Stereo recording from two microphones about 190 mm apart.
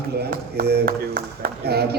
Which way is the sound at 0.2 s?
55° right (ahead or behind).